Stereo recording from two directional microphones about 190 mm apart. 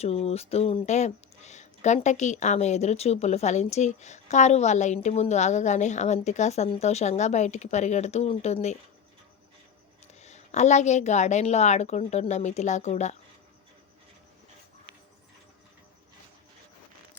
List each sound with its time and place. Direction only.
0.0 s speech: 35° left (ahead or behind)
10.2 s speech: 35° left (ahead or behind)